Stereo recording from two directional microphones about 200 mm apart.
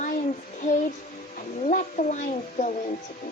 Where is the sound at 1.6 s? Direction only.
35° left (ahead or behind).